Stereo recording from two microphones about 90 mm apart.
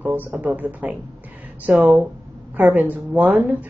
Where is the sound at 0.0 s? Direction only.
20° right (ahead or behind).